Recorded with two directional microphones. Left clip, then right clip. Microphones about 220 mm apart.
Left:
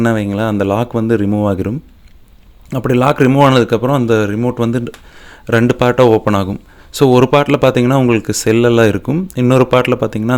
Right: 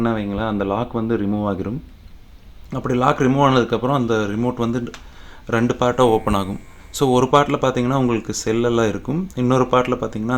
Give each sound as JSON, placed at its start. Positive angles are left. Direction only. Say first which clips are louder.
{"t": 0.0, "sound": "a man's voice", "louder": "left 7 dB", "side_deg": 35}